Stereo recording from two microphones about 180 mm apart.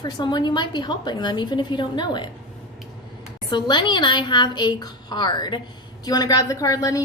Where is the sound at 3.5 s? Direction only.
25° left (ahead or behind).